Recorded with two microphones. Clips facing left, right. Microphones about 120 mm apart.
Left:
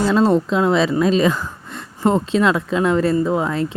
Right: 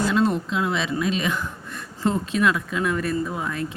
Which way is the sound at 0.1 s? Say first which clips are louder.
Left 6 dB; 35° left (ahead or behind).